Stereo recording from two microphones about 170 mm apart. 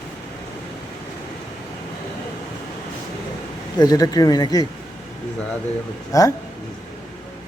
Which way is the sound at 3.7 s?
25° left (ahead or behind).